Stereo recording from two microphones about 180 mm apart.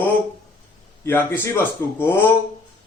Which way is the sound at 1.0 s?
10° left (ahead or behind).